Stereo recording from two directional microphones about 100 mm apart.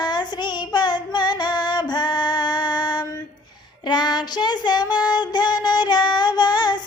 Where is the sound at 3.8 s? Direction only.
45° left (ahead or behind).